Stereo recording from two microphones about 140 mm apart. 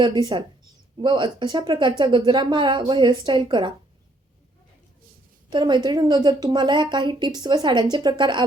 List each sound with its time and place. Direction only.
0.0 s a woman's voice: 30° right (ahead or behind)
5.5 s a woman's voice: 30° right (ahead or behind)